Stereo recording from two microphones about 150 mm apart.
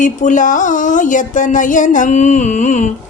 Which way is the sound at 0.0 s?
60° left (ahead or behind).